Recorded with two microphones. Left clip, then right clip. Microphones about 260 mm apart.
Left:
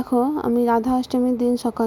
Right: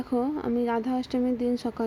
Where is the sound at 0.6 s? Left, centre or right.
Centre.